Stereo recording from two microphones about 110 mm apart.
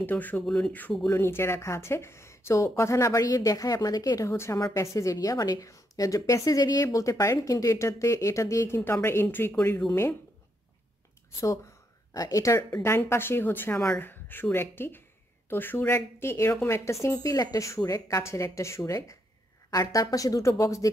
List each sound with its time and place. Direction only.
0.0 s a woman's voice: 15° left (ahead or behind)
12.1 s a woman's voice: 30° left (ahead or behind)